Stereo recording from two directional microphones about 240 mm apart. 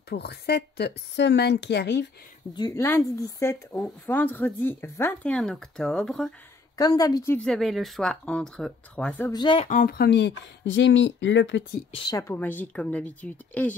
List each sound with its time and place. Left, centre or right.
0.1 s a woman's voice: left
2.5 s speech: centre
6.8 s a woman's voice: centre
9.3 s speech: centre
9.7 s a woman's voice: left
11.9 s speech: centre